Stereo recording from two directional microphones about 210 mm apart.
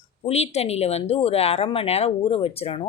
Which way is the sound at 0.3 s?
30° left (ahead or behind).